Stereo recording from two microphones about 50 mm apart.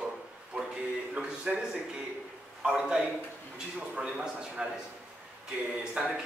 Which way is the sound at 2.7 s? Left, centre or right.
Centre.